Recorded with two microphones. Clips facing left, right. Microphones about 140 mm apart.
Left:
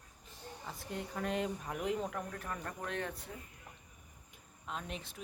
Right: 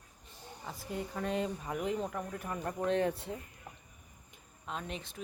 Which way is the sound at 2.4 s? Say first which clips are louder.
Right 6 dB; 20° right (ahead or behind).